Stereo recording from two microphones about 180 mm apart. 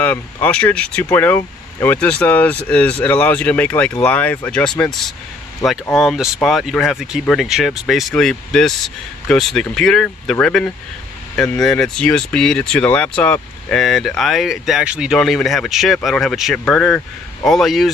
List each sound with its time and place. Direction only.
0.0 s speech: 10° left (ahead or behind)